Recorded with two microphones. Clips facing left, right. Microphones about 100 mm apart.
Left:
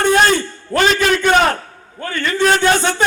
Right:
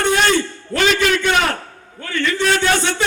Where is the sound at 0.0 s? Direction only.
40° left (ahead or behind).